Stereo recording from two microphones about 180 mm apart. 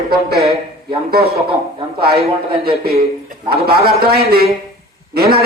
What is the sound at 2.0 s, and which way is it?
A man's voice, 60° right (ahead or behind).